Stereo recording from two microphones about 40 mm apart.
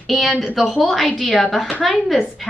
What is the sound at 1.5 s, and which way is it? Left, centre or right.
Speech, centre.